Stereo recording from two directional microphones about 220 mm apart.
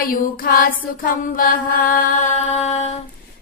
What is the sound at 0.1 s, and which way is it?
Mantra, 40° left (ahead or behind).